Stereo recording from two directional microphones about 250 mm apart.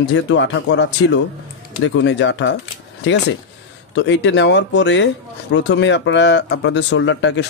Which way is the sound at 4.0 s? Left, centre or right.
Left.